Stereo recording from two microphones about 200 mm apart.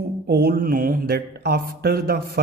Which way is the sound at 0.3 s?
50° right (ahead or behind).